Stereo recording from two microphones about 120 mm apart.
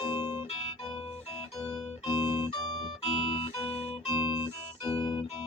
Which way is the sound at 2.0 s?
35° left (ahead or behind).